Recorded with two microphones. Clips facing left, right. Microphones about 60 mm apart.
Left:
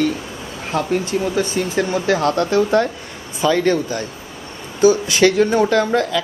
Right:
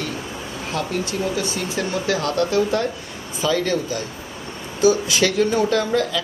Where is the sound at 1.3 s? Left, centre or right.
Left.